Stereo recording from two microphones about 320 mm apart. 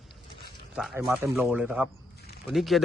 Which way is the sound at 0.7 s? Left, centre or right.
Centre.